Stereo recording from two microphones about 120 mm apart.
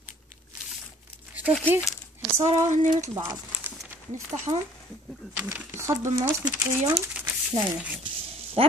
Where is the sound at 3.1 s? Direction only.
25° right (ahead or behind).